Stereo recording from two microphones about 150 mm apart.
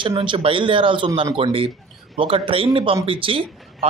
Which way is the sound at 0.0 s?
35° right (ahead or behind).